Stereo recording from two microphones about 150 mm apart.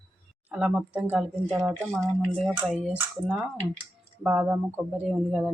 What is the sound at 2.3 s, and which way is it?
A woman's voice, 5° left (ahead or behind).